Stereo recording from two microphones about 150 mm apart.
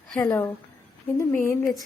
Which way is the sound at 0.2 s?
20° left (ahead or behind).